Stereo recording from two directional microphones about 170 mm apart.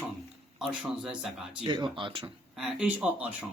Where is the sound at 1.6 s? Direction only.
25° right (ahead or behind).